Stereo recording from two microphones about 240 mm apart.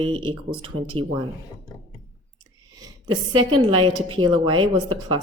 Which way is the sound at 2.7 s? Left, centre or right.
Centre.